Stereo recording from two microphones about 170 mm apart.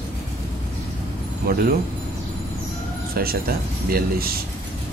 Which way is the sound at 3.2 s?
60° right (ahead or behind).